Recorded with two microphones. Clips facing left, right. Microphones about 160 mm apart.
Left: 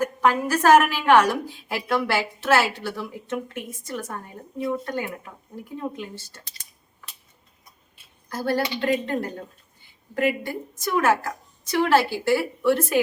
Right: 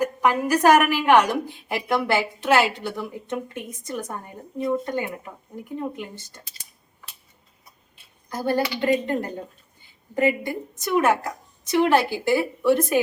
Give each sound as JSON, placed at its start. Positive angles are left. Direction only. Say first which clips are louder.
{"t": 0.0, "sound": "a woman's voice", "louder": "even", "side_deg": -15}
{"t": 8.3, "sound": "a woman's voice", "louder": "right 1 dB", "side_deg": -15}